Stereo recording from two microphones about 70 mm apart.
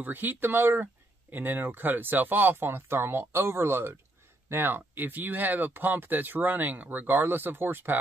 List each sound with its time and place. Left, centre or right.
0.0 s speech: right